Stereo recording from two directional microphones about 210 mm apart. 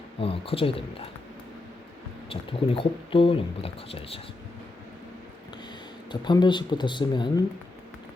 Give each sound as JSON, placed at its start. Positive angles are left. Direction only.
{"t": 0.2, "sound": "speech", "side_deg": 25}
{"t": 2.3, "sound": "speech", "side_deg": 25}
{"t": 6.1, "sound": "speech", "side_deg": 20}